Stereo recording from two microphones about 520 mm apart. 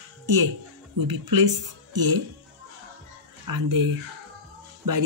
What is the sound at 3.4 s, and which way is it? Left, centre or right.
Speech, right.